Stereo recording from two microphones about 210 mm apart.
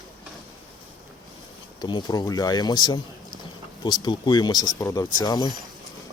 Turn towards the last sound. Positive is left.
turn(degrees=20)  # may be behind; listen again after turning